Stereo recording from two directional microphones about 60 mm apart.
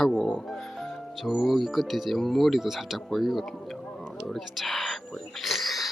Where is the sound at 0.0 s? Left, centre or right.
Centre.